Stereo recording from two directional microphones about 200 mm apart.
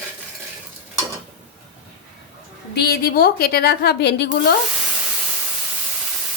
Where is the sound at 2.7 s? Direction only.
50° left (ahead or behind).